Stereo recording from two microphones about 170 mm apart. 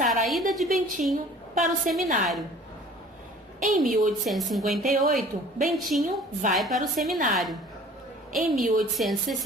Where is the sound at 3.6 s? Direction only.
50° right (ahead or behind).